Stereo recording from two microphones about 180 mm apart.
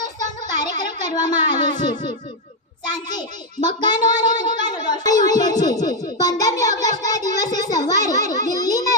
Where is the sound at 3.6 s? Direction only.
25° left (ahead or behind).